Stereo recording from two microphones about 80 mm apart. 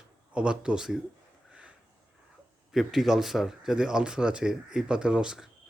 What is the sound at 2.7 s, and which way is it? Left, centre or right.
Speech, centre.